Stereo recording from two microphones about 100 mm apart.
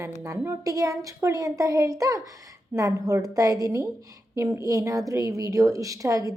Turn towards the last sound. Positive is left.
turn(degrees=-35)  # may be behind; listen again after turning